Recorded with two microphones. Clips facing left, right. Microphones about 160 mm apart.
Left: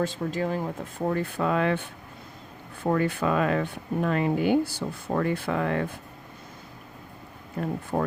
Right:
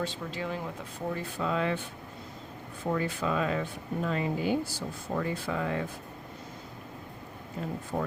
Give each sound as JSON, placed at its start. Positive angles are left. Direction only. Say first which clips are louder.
{"t": 0.0, "sound": "speech", "louder": "left 7 dB", "side_deg": 45}
{"t": 7.6, "sound": "speech", "louder": "left 5 dB", "side_deg": 55}